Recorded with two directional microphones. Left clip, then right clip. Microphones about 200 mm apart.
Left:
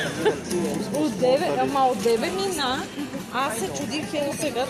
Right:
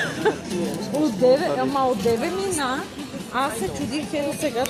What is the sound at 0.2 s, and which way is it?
A woman's voice, 45° right (ahead or behind).